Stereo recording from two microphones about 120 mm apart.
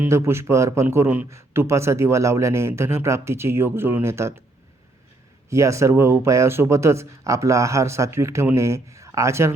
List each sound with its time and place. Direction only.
0.0 s a man's voice: 20° right (ahead or behind)
5.5 s a man's voice: 25° right (ahead or behind)